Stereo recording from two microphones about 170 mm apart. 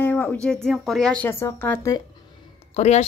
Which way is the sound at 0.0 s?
10° left (ahead or behind).